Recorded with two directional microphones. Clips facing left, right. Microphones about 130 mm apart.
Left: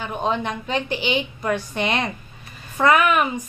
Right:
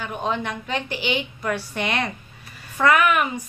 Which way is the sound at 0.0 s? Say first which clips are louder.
Left 2 dB; 20° left (ahead or behind).